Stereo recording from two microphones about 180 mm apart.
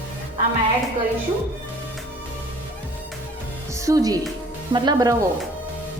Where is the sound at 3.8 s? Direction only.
20° right (ahead or behind).